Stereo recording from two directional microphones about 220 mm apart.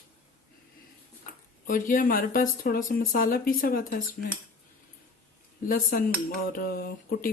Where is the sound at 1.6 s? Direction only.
40° left (ahead or behind).